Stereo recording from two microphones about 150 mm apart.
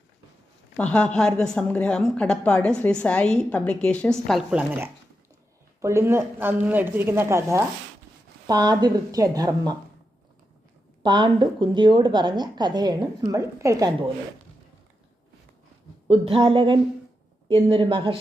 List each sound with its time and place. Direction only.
0.8 s a woman's voice: 10° left (ahead or behind)
4.5 s a woman's voice: 10° right (ahead or behind)
11.0 s a woman's voice: 30° right (ahead or behind)
16.0 s speech: 40° right (ahead or behind)